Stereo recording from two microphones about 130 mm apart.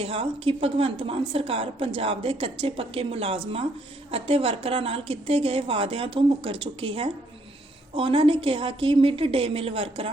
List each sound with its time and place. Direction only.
0.0 s a woman's voice: 45° right (ahead or behind)